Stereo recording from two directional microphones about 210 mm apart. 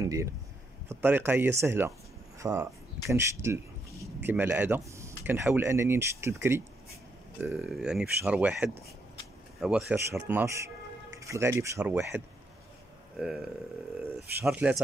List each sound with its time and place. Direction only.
0.0 s speech: 15° right (ahead or behind)
13.2 s speech: 5° right (ahead or behind)